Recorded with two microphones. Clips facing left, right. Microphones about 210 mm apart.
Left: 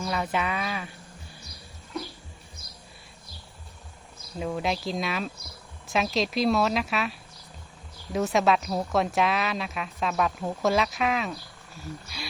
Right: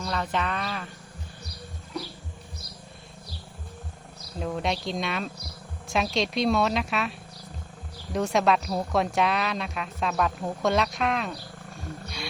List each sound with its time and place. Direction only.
0.0 s speech: 10° left (ahead or behind)
4.4 s a woman's voice: centre (ahead or behind)
12.0 s wild animals: centre (ahead or behind)